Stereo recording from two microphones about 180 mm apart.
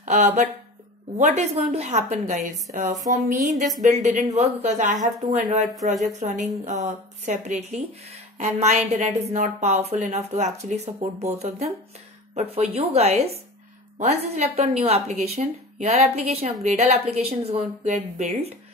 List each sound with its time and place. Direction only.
0.0 s a woman's voice: 45° right (ahead or behind)
14.2 s a woman's voice: 35° right (ahead or behind)